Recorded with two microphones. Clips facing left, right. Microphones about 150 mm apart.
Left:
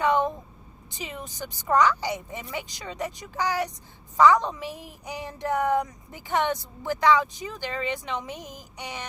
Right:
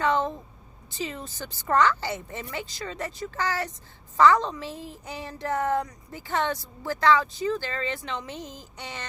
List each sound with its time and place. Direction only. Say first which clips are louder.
0.0 s speech: left 2 dB; 15° left (ahead or behind)